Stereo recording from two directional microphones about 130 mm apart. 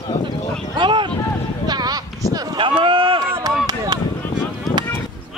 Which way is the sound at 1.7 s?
30° right (ahead or behind).